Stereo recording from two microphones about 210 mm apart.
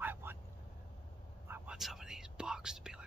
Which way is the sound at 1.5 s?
Centre (ahead or behind).